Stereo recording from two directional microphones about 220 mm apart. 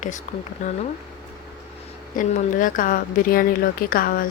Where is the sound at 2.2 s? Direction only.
35° left (ahead or behind).